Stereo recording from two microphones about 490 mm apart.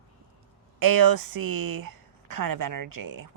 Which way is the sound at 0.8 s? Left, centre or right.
Right.